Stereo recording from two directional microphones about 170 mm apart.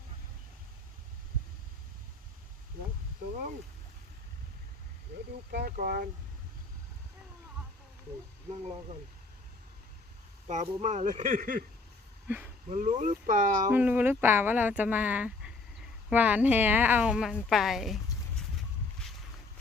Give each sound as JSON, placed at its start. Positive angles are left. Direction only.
{"t": 5.5, "sound": "speech", "side_deg": -60}
{"t": 10.4, "sound": "speech", "side_deg": -40}
{"t": 12.6, "sound": "speech", "side_deg": -45}
{"t": 13.7, "sound": "speech", "side_deg": -10}